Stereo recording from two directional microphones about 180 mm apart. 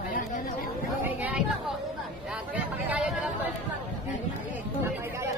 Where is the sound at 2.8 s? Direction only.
10° right (ahead or behind).